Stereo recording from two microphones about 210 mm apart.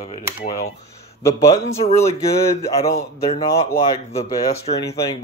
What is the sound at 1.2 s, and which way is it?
Speech, 15° left (ahead or behind).